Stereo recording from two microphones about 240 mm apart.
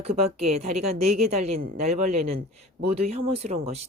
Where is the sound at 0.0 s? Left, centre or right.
Right.